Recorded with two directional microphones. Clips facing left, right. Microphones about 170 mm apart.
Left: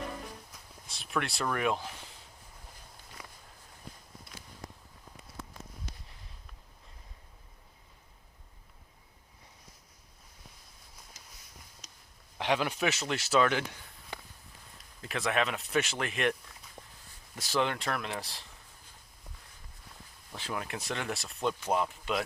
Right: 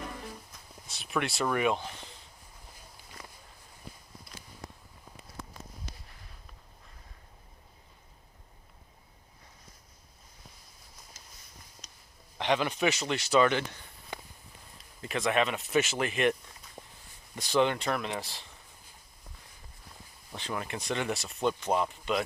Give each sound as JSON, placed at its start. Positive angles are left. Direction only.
{"t": 0.5, "sound": "speech", "side_deg": 0}
{"t": 11.8, "sound": "a sound", "side_deg": 10}
{"t": 12.4, "sound": "speech", "side_deg": 5}
{"t": 15.0, "sound": "speech", "side_deg": 0}
{"t": 16.8, "sound": "a sound", "side_deg": -20}
{"t": 17.3, "sound": "speech", "side_deg": 0}
{"t": 20.3, "sound": "speech", "side_deg": 0}